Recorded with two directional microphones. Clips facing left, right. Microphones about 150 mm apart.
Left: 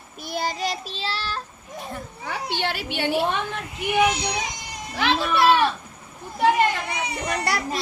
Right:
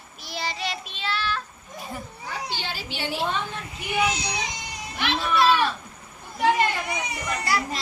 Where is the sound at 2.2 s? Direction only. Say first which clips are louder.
Left 7 dB; 65° left (ahead or behind).